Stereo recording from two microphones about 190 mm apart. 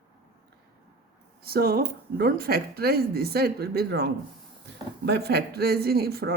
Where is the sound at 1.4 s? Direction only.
55° right (ahead or behind).